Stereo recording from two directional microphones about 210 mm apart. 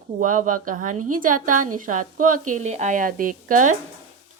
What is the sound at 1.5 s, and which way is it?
Speech, 90° right.